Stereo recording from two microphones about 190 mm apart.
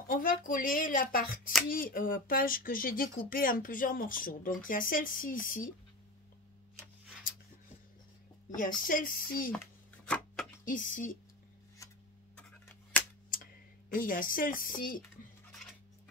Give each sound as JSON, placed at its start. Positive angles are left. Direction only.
{"t": 0.1, "sound": "speech", "side_deg": 45}
{"t": 8.8, "sound": "speech", "side_deg": 45}
{"t": 10.0, "sound": "a sound", "side_deg": 5}
{"t": 10.6, "sound": "speech", "side_deg": 45}
{"t": 11.8, "sound": "tick-tock", "side_deg": 15}
{"t": 13.9, "sound": "speech", "side_deg": 45}